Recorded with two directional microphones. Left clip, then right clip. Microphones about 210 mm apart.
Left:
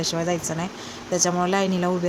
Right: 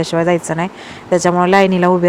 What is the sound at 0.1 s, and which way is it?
Speech, 35° right (ahead or behind).